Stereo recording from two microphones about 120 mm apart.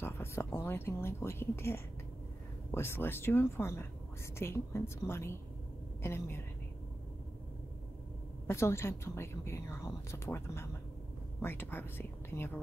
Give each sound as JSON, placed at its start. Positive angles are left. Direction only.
{"t": 0.0, "sound": "a woman's voice", "side_deg": 20}
{"t": 8.5, "sound": "a woman's voice", "side_deg": 20}